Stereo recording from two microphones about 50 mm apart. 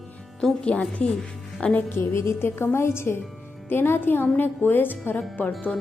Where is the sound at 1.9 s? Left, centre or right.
Left.